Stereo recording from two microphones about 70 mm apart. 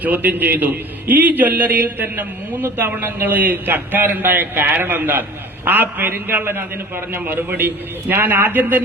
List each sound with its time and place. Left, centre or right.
0.0 s a man's voice: right